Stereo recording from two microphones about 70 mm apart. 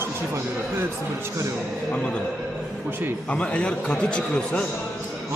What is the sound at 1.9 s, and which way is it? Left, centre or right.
Speech, centre.